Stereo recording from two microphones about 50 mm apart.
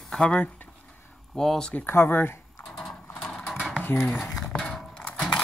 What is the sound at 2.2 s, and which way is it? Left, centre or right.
Typing, left.